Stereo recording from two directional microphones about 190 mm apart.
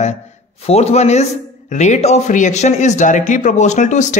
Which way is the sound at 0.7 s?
35° left (ahead or behind).